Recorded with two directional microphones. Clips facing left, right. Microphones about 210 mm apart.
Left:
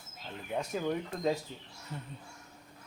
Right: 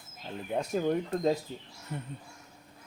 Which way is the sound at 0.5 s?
35° right (ahead or behind).